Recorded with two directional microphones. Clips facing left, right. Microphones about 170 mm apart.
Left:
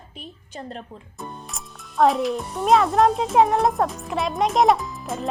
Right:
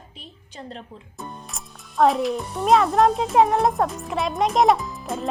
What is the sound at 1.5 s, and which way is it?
A child's voice, centre (ahead or behind).